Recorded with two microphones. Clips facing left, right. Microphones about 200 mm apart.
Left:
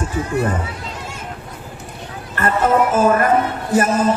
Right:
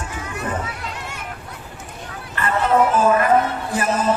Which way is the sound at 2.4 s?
45° left (ahead or behind).